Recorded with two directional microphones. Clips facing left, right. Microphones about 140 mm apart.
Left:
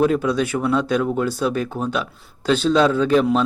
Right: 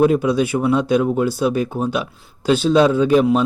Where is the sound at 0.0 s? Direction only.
15° right (ahead or behind).